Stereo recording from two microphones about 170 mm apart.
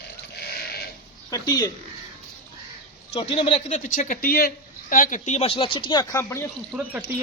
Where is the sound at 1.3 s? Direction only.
20° left (ahead or behind).